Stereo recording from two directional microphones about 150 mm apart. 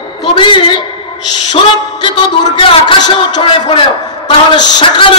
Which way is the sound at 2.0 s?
35° left (ahead or behind).